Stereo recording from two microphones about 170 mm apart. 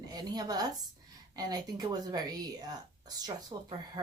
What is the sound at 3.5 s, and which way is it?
Speech, 25° right (ahead or behind).